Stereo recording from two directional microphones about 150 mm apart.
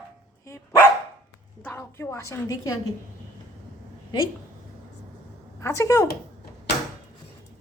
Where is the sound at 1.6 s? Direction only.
15° left (ahead or behind).